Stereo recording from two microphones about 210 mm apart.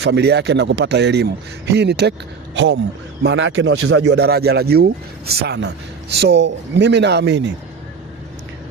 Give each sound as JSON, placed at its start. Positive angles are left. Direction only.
{"t": 0.0, "sound": "speech", "side_deg": -55}